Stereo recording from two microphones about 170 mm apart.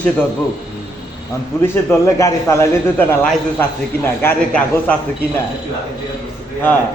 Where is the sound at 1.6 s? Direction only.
15° left (ahead or behind).